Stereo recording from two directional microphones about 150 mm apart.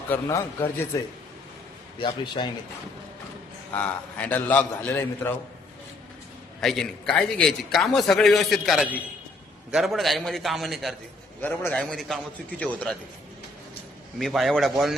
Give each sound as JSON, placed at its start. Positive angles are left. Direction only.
{"t": 0.1, "sound": "a man's voice", "side_deg": 15}
{"t": 2.0, "sound": "a man's voice", "side_deg": 30}
{"t": 3.7, "sound": "a man's voice", "side_deg": 10}
{"t": 6.6, "sound": "a man's voice", "side_deg": 0}
{"t": 14.2, "sound": "a man's voice", "side_deg": 0}